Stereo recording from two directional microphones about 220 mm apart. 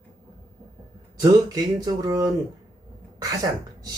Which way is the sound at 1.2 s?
15° right (ahead or behind).